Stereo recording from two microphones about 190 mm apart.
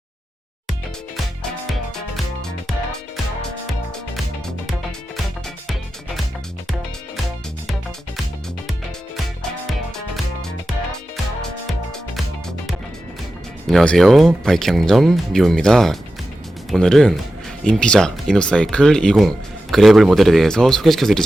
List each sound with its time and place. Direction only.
0.7 s music: centre (ahead or behind)
4.6 s music: centre (ahead or behind)
13.7 s speech: centre (ahead or behind)